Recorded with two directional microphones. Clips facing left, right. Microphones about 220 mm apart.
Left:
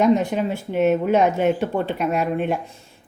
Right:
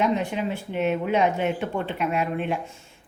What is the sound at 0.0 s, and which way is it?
A woman's voice, 40° left (ahead or behind).